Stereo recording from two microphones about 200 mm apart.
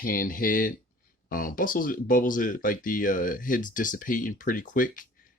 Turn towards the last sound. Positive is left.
turn(degrees=40)  # may be behind; listen again after turning